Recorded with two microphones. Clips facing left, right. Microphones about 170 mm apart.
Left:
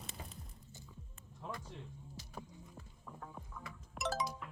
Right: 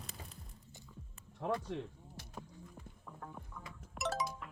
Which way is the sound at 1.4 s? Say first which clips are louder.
Right 10 dB; 70° right (ahead or behind).